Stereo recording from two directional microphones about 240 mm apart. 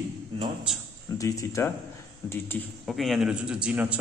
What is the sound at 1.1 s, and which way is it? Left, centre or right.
A man's voice, centre.